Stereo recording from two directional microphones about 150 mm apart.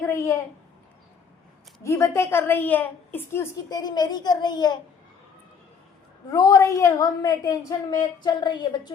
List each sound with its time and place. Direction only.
0.1 s a sound: 20° left (ahead or behind)
1.8 s a woman's voice: 20° left (ahead or behind)
6.3 s a woman's voice: 20° left (ahead or behind)